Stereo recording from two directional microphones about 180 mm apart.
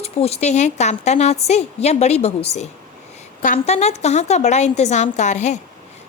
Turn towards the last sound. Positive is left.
turn(degrees=40)  # may be behind; listen again after turning